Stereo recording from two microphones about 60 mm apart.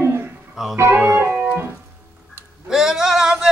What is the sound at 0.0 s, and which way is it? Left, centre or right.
Music, right.